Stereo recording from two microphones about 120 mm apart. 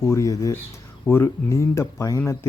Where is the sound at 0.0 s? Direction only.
25° left (ahead or behind).